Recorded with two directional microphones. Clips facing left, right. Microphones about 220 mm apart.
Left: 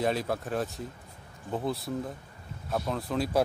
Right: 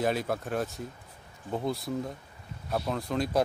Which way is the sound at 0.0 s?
Centre (ahead or behind).